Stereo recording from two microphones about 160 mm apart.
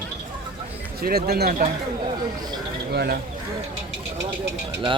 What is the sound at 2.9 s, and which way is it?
Speech, 70° right (ahead or behind).